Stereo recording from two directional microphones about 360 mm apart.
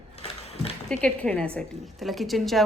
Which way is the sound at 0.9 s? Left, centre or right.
Centre.